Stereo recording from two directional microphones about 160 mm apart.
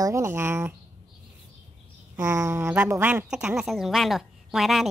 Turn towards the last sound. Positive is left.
turn(degrees=0)  # may be behind; listen again after turning